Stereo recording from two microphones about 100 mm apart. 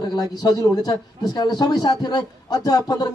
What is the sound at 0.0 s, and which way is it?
Speech, 45° left (ahead or behind).